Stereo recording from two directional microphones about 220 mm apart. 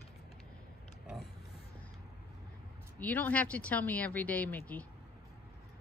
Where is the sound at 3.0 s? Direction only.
5° left (ahead or behind).